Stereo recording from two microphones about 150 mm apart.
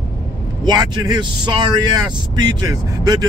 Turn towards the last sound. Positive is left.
turn(degrees=-25)  # may be behind; listen again after turning